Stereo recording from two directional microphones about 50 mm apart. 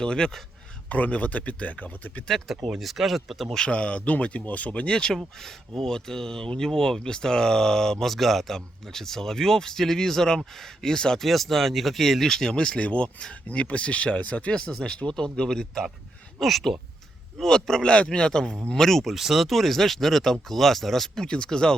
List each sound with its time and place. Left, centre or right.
0.0 s speech: centre
0.9 s speech: left
2.6 s speech: centre
3.5 s speech: centre
5.1 s speech: centre
19.1 s speech: centre
21.2 s speech: centre